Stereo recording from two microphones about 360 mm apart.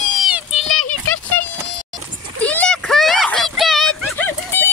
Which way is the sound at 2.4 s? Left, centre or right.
Centre.